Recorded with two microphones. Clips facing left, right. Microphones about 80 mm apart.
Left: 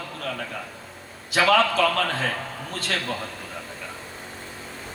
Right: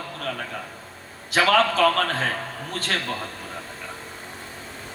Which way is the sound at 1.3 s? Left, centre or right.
Right.